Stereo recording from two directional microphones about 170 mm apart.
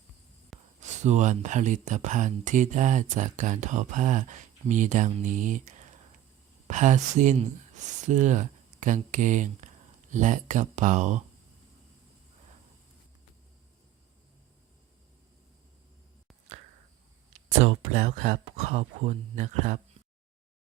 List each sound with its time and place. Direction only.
0.8 s speech: 45° right (ahead or behind)
17.6 s speech: 40° right (ahead or behind)